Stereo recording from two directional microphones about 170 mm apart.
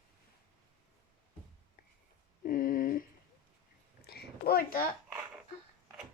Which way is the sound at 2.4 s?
55° left (ahead or behind).